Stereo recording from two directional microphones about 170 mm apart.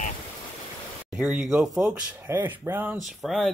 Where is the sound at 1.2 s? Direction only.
10° right (ahead or behind).